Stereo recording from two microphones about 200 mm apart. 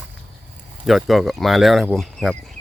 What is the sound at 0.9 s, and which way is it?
Speech, centre (ahead or behind).